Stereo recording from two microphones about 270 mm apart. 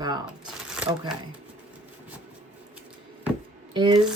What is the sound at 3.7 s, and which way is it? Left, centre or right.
Speech, centre.